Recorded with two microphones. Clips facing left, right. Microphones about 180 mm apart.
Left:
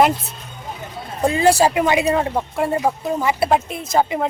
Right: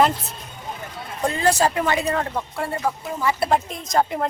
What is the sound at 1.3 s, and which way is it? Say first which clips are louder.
A woman's voice: left 5 dB; 10° left (ahead or behind).